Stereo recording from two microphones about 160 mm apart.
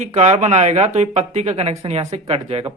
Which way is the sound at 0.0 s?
45° right (ahead or behind).